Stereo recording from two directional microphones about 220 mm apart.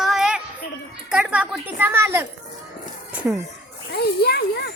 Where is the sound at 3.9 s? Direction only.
45° left (ahead or behind).